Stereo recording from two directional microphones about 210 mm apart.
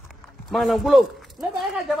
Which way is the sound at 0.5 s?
Centre (ahead or behind).